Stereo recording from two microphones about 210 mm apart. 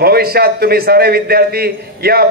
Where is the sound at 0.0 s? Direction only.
45° right (ahead or behind).